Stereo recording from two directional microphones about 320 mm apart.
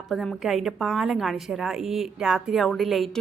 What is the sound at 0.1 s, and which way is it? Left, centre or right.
A woman's voice, centre.